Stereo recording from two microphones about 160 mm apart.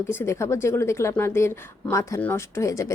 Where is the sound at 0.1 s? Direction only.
15° left (ahead or behind).